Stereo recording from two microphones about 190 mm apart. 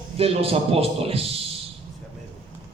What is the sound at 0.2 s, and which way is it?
A man's voice, 30° right (ahead or behind).